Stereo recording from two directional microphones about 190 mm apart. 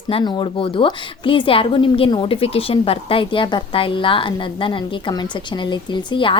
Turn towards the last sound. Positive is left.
turn(degrees=25)  # may be behind; listen again after turning